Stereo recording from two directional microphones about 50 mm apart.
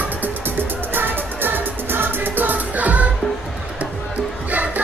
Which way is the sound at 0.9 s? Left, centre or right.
Right.